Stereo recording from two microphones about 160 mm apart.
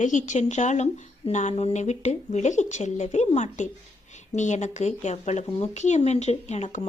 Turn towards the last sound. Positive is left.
turn(degrees=45)  # may be behind; listen again after turning